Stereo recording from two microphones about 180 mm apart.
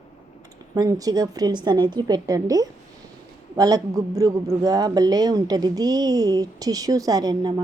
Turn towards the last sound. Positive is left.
turn(degrees=-25)  # may be behind; listen again after turning